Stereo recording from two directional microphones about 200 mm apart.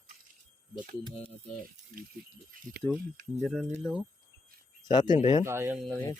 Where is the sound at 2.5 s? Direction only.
45° right (ahead or behind).